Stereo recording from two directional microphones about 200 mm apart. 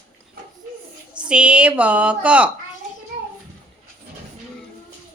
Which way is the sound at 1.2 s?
5° right (ahead or behind).